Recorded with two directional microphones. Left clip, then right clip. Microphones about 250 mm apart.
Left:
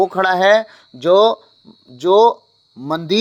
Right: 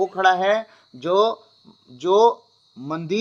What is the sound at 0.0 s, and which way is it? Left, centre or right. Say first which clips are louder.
Speech: left 4 dB; left.